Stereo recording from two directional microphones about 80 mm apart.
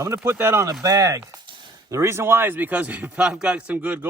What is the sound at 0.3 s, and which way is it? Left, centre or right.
Speech, right.